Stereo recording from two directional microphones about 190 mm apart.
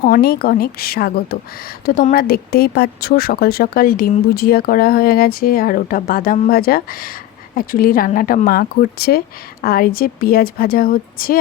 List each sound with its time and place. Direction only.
0.0 s a woman's voice: 55° left (ahead or behind)